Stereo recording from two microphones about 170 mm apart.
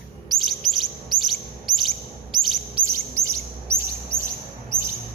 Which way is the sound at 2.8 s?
15° right (ahead or behind).